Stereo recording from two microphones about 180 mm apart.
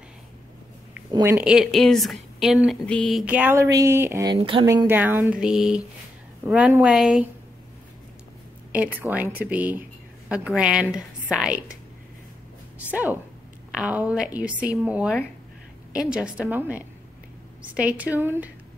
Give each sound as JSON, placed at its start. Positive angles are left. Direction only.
{"t": 1.1, "sound": "speech", "side_deg": -20}
{"t": 1.4, "sound": "speech", "side_deg": -5}
{"t": 4.4, "sound": "speech", "side_deg": -30}
{"t": 4.6, "sound": "speech", "side_deg": -15}
{"t": 8.7, "sound": "speech", "side_deg": -10}
{"t": 12.9, "sound": "speech", "side_deg": -10}